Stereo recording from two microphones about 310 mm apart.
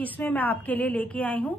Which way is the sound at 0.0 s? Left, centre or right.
Centre.